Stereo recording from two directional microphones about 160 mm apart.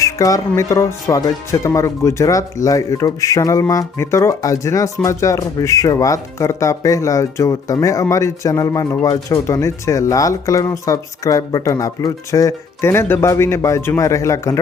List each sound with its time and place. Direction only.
0.0 s speech: 20° left (ahead or behind)